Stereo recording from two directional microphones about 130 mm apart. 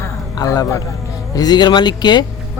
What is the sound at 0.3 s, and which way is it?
Speech, 25° left (ahead or behind).